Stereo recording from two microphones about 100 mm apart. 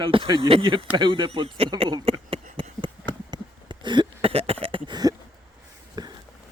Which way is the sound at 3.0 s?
50° right (ahead or behind).